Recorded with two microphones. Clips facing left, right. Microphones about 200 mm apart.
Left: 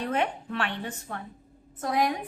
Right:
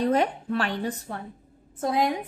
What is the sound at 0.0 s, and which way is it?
A woman's voice, 35° right (ahead or behind).